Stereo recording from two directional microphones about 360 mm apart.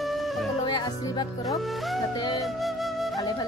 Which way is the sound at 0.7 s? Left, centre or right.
Centre.